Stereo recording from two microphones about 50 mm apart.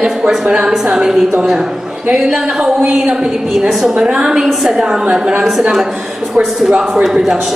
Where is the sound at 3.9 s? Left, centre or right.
Centre.